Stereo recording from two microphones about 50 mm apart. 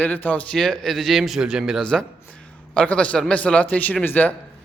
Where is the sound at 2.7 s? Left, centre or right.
Left.